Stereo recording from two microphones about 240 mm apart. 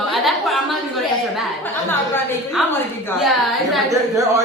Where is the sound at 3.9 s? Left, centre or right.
Centre.